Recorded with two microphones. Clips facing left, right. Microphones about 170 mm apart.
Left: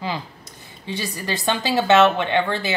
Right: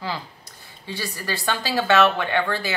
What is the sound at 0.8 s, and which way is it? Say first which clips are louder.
Speech: left 3 dB; 20° left (ahead or behind).